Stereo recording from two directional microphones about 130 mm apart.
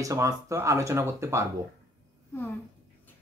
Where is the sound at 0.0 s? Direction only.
25° right (ahead or behind).